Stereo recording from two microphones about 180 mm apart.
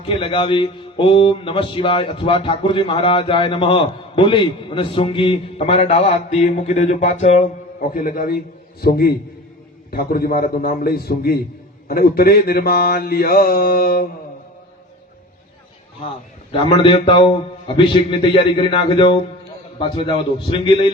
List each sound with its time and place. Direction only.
0.1 s a man's voice: 30° left (ahead or behind); by 8.4 s 55° left (ahead or behind)
8.8 s mantra: 60° left (ahead or behind)
16.5 s a man's voice: 30° left (ahead or behind)
20.5 s a man's voice: 30° left (ahead or behind)